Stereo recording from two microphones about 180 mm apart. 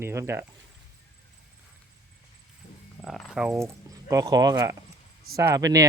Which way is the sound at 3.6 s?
15° right (ahead or behind).